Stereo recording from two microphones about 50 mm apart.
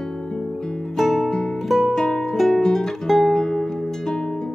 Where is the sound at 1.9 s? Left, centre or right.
Centre.